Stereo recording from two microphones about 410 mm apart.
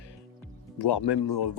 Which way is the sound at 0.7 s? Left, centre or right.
Left.